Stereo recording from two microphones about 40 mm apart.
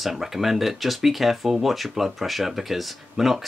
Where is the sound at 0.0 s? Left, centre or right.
Centre.